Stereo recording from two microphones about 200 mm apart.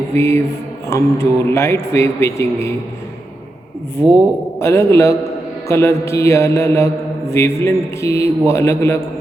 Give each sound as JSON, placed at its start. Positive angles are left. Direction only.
{"t": 0.2, "sound": "speech", "side_deg": 15}
{"t": 4.6, "sound": "speech", "side_deg": 15}